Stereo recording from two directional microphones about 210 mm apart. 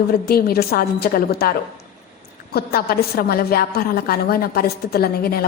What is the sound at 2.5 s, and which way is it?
A woman's voice, 45° left (ahead or behind).